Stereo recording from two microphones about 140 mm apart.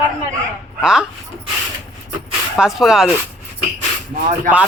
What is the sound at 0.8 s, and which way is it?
Speech, 5° right (ahead or behind).